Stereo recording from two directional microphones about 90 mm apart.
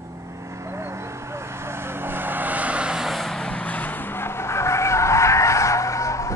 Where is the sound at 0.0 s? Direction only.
35° right (ahead or behind).